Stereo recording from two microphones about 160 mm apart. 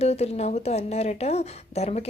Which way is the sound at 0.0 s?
40° left (ahead or behind).